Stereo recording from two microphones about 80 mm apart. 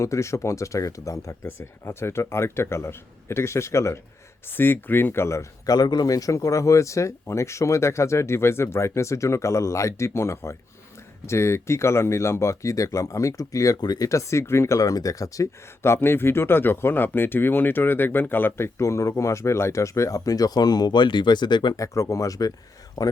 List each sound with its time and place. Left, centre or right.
0.0 s speech: left
1.5 s speech: left
5.7 s speech: left
14.1 s speech: left
14.8 s speech: left
15.8 s speech: left
21.8 s speech: left